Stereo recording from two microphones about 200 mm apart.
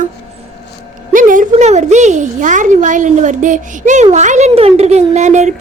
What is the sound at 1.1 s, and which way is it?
Speech, 40° right (ahead or behind).